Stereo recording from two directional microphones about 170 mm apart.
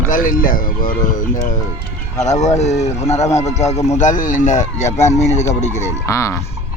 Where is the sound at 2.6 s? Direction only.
40° left (ahead or behind).